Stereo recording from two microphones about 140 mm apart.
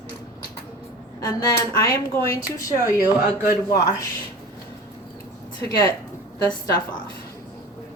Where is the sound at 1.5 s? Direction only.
20° left (ahead or behind).